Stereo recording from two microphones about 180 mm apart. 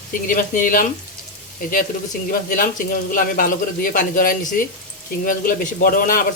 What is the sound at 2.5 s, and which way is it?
A man's voice, 50° left (ahead or behind).